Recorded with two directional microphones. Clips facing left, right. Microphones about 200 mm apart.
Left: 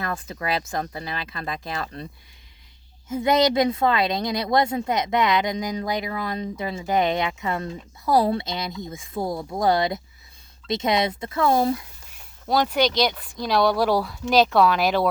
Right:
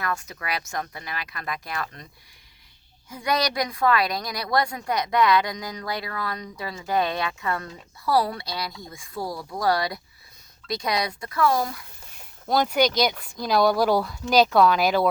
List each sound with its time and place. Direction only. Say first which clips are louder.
0.0 s a woman's voice: left 2 dB; 30° left (ahead or behind)
3.1 s a woman's voice: left 6 dB; 25° left (ahead or behind)
12.5 s speech: even; centre (ahead or behind)